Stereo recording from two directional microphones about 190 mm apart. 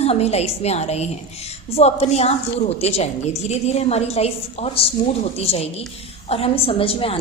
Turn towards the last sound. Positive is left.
turn(degrees=30)  # may be behind; listen again after turning